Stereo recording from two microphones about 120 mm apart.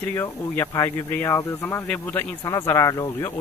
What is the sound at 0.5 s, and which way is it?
Speech, 25° left (ahead or behind).